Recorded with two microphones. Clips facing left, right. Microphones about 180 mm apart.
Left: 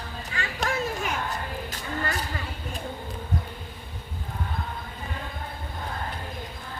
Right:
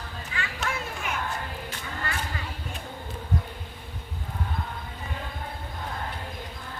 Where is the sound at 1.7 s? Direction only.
40° left (ahead or behind).